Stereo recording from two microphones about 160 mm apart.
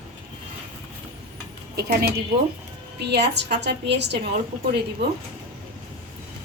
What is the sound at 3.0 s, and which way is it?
A woman's voice, 90° right.